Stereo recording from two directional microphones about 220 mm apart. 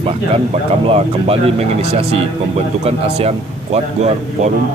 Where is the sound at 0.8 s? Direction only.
25° right (ahead or behind).